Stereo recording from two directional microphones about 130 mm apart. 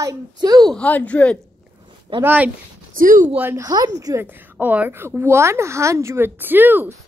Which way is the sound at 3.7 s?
30° right (ahead or behind).